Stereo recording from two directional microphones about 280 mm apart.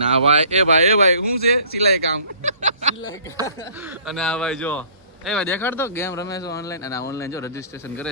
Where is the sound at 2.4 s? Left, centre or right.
Right.